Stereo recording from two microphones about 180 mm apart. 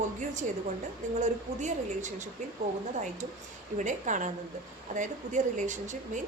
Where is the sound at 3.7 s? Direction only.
45° right (ahead or behind).